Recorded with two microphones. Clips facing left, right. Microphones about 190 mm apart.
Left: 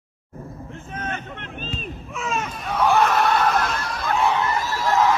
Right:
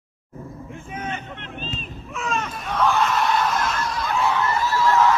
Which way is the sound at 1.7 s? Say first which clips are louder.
Left 2 dB; centre (ahead or behind).